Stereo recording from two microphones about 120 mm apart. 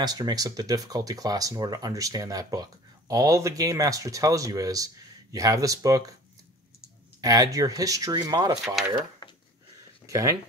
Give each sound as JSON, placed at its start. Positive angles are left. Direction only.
{"t": 0.0, "sound": "speech", "side_deg": -35}
{"t": 7.2, "sound": "speech", "side_deg": -30}
{"t": 10.0, "sound": "speech", "side_deg": -25}